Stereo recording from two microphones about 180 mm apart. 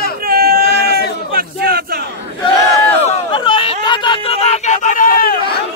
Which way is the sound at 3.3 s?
25° left (ahead or behind).